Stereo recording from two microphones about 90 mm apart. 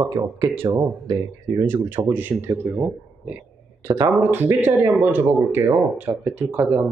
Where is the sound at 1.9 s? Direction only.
25° right (ahead or behind).